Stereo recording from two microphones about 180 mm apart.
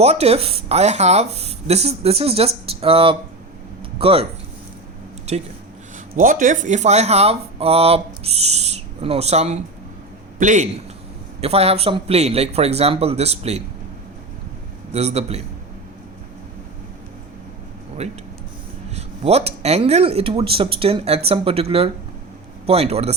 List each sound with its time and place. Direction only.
0.0 s speech: 35° right (ahead or behind)
5.3 s speech: 40° right (ahead or behind)
6.1 s a man's voice: 50° right (ahead or behind)
14.9 s speech: 35° right (ahead or behind)
18.0 s speech: 40° right (ahead or behind)